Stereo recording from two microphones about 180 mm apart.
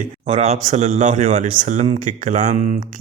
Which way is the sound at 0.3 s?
40° right (ahead or behind).